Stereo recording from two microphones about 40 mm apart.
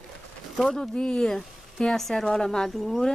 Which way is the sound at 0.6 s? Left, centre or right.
Centre.